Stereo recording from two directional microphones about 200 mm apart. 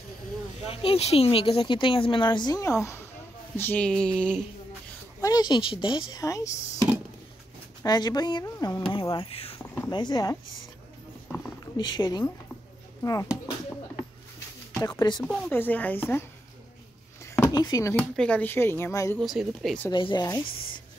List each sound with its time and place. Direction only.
0.7 s speech: 30° left (ahead or behind); by 4.1 s 5° left (ahead or behind)
5.2 s speech: 20° left (ahead or behind)
7.8 s speech: 20° left (ahead or behind)
11.2 s a sound: 5° left (ahead or behind)
11.7 s speech: 20° left (ahead or behind)
14.7 s speech: 15° left (ahead or behind)
15.1 s speech: centre (ahead or behind)
17.5 s speech: 20° left (ahead or behind)
18.1 s speech: 5° left (ahead or behind)
19.1 s speech: centre (ahead or behind)
19.9 s speech: 25° left (ahead or behind)